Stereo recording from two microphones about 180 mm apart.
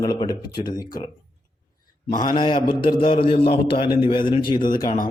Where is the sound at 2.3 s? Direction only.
25° left (ahead or behind).